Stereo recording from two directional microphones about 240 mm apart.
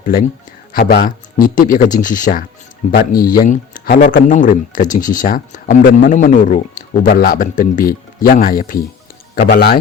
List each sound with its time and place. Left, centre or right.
0.0 s speech: left